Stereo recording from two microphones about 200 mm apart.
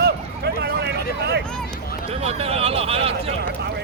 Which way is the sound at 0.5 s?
55° right (ahead or behind).